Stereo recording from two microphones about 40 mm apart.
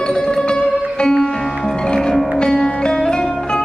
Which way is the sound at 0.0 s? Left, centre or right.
Centre.